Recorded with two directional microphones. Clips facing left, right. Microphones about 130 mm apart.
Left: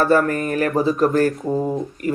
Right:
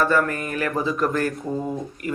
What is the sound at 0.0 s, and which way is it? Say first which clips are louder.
Speech: left 4 dB; 40° left (ahead or behind).